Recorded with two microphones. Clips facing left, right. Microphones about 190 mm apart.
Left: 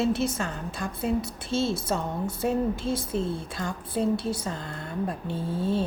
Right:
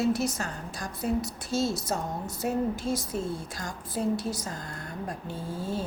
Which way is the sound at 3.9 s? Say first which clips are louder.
Left 2 dB; 30° left (ahead or behind).